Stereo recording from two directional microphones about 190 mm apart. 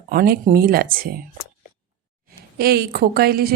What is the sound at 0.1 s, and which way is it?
A woman's voice, 50° right (ahead or behind).